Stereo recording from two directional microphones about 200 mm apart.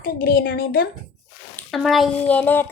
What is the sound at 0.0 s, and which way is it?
Speech, 45° left (ahead or behind).